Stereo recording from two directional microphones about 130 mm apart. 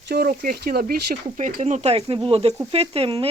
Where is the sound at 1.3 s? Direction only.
70° right (ahead or behind); by 3.3 s 45° right (ahead or behind).